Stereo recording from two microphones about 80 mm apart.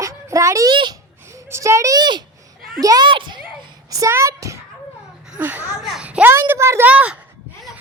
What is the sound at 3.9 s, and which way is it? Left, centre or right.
Speech, right.